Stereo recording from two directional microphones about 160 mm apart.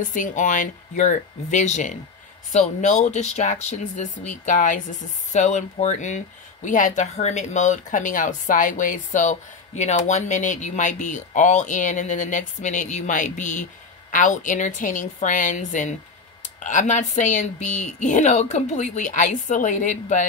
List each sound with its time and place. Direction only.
0.1 s speech: 55° left (ahead or behind)